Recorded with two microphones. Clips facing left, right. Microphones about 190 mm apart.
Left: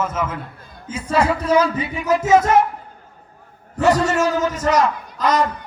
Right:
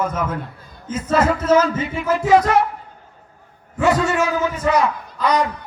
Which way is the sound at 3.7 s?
40° left (ahead or behind).